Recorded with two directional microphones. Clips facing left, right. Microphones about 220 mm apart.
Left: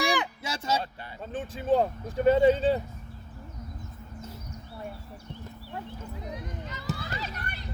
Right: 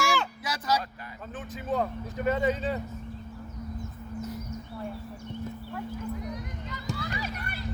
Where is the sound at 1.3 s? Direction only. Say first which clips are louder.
Left 6 dB; 30° left (ahead or behind).